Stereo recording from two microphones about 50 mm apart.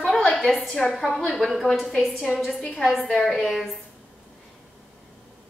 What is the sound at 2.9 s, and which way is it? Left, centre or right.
Speech, centre.